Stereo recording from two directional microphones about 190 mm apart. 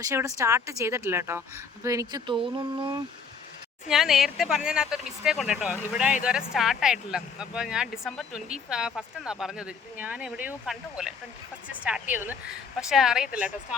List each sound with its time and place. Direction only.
0.0 s a woman's voice: 15° right (ahead or behind)
3.8 s a woman's voice: centre (ahead or behind)